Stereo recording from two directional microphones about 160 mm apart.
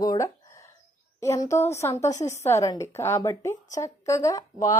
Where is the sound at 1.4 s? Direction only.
15° left (ahead or behind).